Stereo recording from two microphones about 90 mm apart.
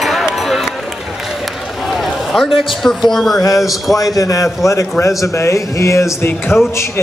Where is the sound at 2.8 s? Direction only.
5° left (ahead or behind).